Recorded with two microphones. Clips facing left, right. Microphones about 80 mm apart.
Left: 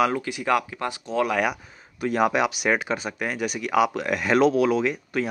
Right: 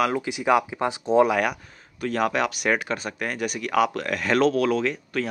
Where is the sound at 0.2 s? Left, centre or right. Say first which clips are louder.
Right 2 dB; centre.